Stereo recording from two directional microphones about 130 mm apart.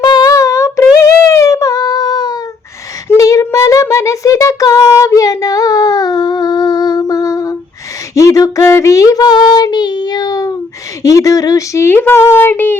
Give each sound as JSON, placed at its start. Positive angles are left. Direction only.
{"t": 0.0, "sound": "humming", "side_deg": 35}
{"t": 3.1, "sound": "a sound", "side_deg": 25}
{"t": 8.1, "sound": "child singing", "side_deg": 25}
{"t": 11.0, "sound": "speech", "side_deg": 25}